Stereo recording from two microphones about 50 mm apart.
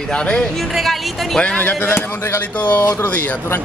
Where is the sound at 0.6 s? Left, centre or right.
Centre.